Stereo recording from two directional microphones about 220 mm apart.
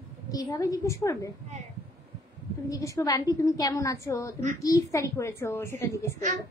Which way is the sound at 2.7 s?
15° left (ahead or behind).